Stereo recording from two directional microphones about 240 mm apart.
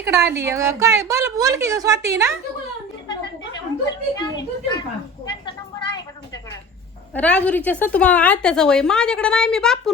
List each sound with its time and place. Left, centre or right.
0.2 s a woman's voice: centre
3.8 s a woman's voice: centre
5.3 s a sound: centre
7.1 s a woman's voice: centre